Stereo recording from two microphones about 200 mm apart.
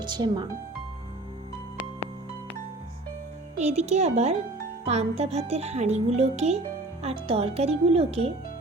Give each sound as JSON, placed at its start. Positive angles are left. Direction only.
{"t": 0.0, "sound": "speech", "side_deg": -20}
{"t": 3.6, "sound": "speech", "side_deg": -30}